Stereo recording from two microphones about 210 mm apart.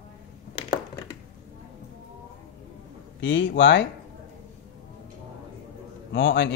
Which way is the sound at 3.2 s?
60° left (ahead or behind).